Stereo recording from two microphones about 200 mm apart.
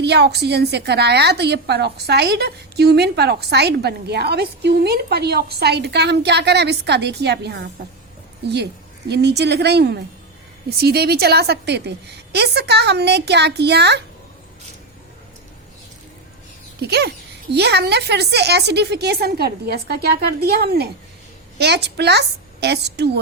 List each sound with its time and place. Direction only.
0.0 s a woman's voice: 55° right (ahead or behind)
16.8 s a woman's voice: 55° right (ahead or behind)